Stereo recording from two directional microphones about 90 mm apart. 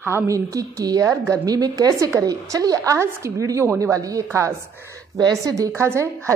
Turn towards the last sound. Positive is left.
turn(degrees=-30)  # may be behind; listen again after turning